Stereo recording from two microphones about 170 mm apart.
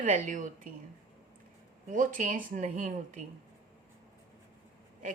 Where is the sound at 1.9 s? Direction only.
50° right (ahead or behind).